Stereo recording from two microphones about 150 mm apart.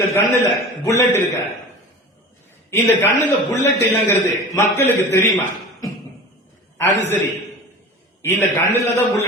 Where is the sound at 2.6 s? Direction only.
15° left (ahead or behind).